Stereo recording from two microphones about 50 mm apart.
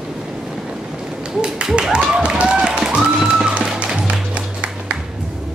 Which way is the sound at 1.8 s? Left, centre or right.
Centre.